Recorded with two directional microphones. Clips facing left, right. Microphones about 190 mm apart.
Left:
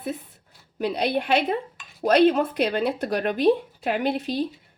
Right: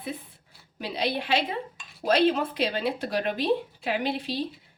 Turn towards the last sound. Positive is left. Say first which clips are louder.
# left 4 dB
turn(degrees=45)  # may be behind; listen again after turning